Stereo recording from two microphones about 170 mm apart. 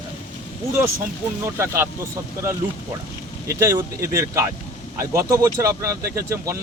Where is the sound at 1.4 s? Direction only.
15° right (ahead or behind).